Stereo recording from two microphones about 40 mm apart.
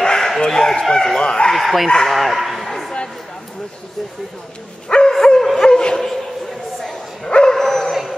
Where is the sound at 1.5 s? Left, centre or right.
Centre.